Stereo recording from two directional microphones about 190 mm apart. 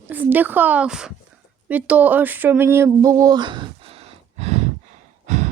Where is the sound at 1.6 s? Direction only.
5° right (ahead or behind).